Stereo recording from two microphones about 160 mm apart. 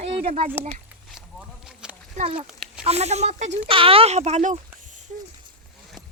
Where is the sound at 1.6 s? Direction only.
5° right (ahead or behind).